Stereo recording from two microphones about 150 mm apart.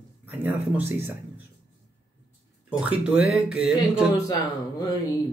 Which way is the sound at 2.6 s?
10° right (ahead or behind).